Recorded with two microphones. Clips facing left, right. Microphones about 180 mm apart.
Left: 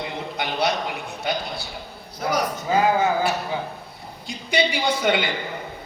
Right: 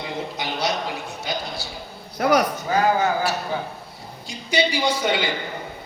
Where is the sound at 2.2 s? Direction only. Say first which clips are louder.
Right 6 dB; 70° right (ahead or behind).